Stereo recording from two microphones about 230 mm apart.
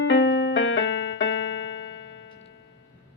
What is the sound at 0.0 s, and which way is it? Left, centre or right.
Music, left.